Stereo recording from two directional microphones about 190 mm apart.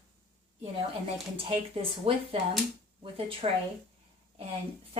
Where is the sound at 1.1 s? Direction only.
30° right (ahead or behind).